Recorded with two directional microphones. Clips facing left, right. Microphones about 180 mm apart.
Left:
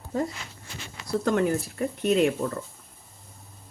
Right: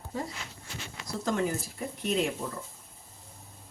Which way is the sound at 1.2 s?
60° left (ahead or behind).